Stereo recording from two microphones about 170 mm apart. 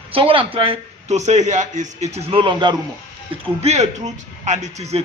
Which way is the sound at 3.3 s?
40° right (ahead or behind).